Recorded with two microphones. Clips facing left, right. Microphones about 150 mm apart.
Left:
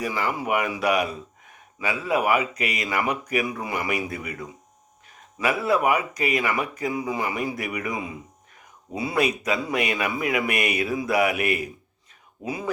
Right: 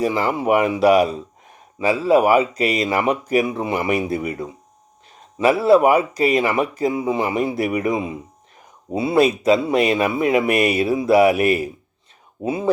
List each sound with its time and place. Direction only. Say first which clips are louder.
0.0 s speech: right 7 dB; 30° right (ahead or behind)